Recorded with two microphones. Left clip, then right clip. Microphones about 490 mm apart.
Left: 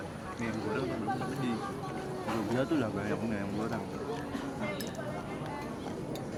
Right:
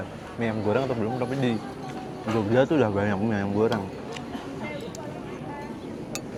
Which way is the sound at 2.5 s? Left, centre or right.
Right.